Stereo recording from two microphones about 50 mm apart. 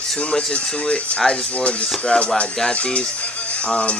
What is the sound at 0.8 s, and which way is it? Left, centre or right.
Speech, centre.